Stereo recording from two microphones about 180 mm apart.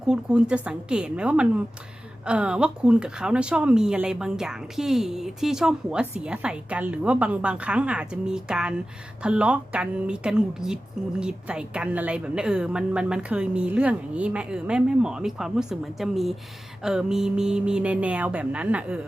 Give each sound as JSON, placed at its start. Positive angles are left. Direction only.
{"t": 0.1, "sound": "a woman's voice", "side_deg": -5}